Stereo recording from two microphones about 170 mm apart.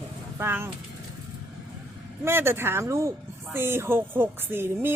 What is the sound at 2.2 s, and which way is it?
Speech, 15° right (ahead or behind).